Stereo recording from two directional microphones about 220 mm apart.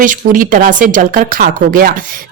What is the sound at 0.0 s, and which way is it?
A woman's voice, 35° right (ahead or behind).